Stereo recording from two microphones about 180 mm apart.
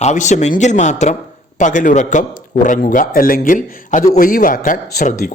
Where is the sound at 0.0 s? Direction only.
40° left (ahead or behind).